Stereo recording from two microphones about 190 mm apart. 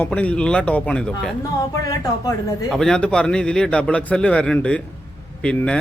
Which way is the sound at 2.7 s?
5° left (ahead or behind).